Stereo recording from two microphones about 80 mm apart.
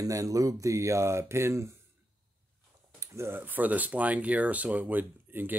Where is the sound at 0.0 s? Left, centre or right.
Right.